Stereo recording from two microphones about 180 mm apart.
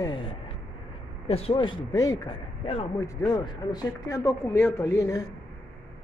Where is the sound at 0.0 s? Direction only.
25° left (ahead or behind).